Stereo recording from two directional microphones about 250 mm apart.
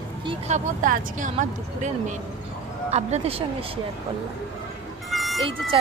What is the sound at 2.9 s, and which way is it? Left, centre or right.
Speech, right.